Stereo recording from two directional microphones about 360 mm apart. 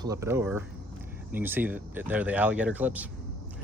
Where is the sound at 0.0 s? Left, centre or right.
Centre.